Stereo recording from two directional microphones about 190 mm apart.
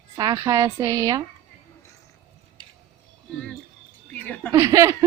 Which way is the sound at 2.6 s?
25° right (ahead or behind).